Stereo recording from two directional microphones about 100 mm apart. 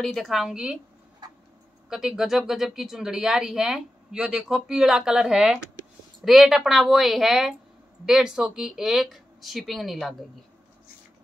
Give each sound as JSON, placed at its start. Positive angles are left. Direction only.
{"t": 0.0, "sound": "speech", "side_deg": 0}
{"t": 1.2, "sound": "tick-tock", "side_deg": -45}
{"t": 1.9, "sound": "speech", "side_deg": -5}